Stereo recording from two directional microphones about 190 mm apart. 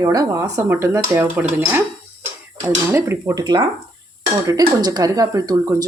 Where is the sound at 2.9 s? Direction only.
15° right (ahead or behind).